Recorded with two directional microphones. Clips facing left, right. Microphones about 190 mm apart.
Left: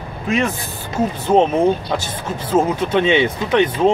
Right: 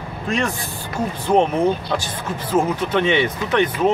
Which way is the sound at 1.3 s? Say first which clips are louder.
Left 2 dB; 25° left (ahead or behind).